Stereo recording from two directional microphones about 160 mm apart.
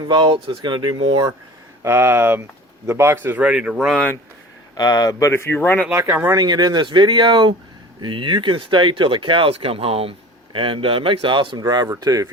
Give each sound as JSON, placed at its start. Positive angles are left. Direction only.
{"t": 0.0, "sound": "speech", "side_deg": -30}
{"t": 1.8, "sound": "a man's voice", "side_deg": -15}
{"t": 4.8, "sound": "speech", "side_deg": 25}
{"t": 5.9, "sound": "speech", "side_deg": -15}